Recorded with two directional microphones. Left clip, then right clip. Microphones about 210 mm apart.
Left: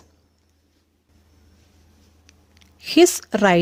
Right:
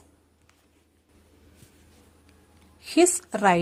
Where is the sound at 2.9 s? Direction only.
40° left (ahead or behind).